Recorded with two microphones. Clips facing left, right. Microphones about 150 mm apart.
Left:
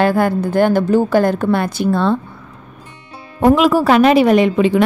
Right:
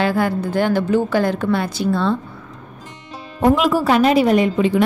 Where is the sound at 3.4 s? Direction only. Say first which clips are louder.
Left 4 dB; 90° left.